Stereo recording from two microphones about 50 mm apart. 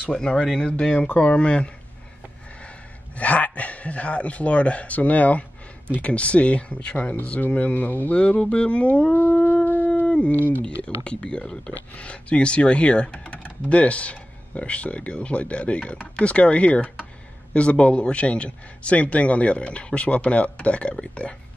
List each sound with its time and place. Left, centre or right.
0.0 s speech: centre
3.2 s speech: left
8.2 s speech: left
10.0 s a sound: centre
10.6 s speech: left